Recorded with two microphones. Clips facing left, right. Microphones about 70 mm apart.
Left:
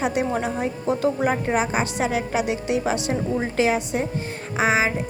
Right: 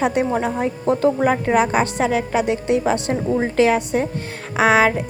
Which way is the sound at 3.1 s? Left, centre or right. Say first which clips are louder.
Right 4 dB; right.